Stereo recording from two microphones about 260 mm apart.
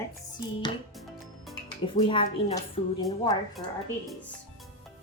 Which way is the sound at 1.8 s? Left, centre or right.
Centre.